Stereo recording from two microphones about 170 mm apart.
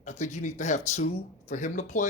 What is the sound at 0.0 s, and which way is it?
Speech, 45° left (ahead or behind).